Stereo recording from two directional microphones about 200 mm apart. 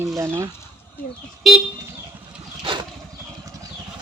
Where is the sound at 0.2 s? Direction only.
15° right (ahead or behind).